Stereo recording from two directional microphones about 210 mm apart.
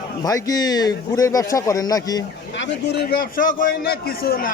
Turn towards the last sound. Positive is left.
turn(degrees=45)  # may be behind; listen again after turning